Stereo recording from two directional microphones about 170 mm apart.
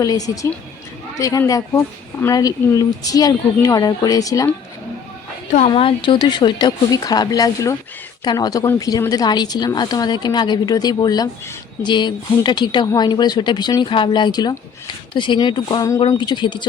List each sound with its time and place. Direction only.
0.0 s speech: 20° left (ahead or behind)
5.5 s speech: 40° left (ahead or behind)